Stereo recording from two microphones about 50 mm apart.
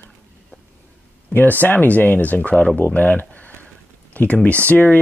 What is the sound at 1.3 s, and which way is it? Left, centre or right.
Speech, left.